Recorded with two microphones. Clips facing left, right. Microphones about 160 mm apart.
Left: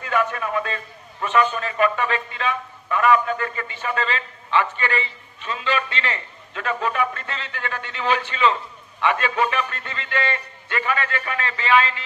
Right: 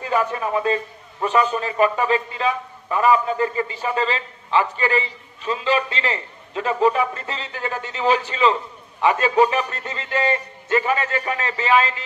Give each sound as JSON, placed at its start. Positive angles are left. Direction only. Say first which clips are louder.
{"t": 0.0, "sound": "a man's voice", "louder": "right 2 dB", "side_deg": -35}